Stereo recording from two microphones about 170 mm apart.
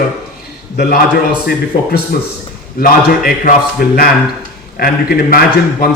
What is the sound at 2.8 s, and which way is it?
A man's voice, 55° left (ahead or behind).